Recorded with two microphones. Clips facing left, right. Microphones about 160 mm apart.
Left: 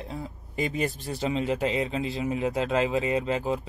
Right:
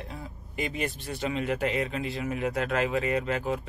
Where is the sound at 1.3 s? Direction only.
25° left (ahead or behind).